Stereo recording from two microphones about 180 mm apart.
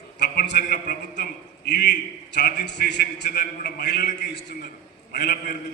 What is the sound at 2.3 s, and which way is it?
A man's voice, 65° left (ahead or behind).